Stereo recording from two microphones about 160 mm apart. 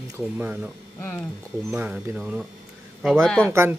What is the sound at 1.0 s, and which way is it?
Speech, 10° left (ahead or behind).